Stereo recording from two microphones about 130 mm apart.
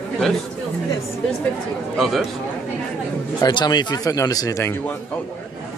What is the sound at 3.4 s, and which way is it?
Speech, 30° left (ahead or behind).